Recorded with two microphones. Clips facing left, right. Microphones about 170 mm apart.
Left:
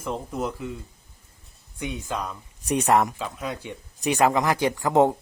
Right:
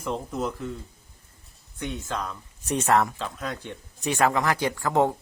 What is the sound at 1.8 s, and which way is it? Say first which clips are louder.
A man's voice: left 1 dB; 10° left (ahead or behind).